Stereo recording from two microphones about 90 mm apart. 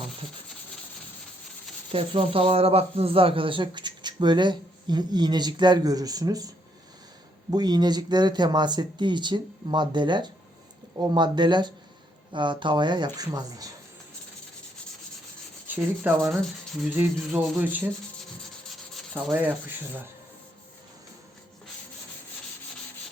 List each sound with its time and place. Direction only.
1.9 s a man's voice: 90° right; by 6.5 s 45° right (ahead or behind)
7.5 s a man's voice: 50° right (ahead or behind)
13.1 s speech: 45° right (ahead or behind)
15.6 s rub: 20° right (ahead or behind)
17.3 s speech: 20° right (ahead or behind)
19.1 s speech: 20° right (ahead or behind)